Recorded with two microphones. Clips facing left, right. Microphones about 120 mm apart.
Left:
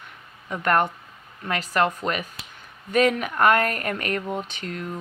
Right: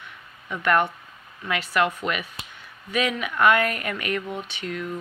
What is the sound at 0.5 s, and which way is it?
Speech, 40° left (ahead or behind).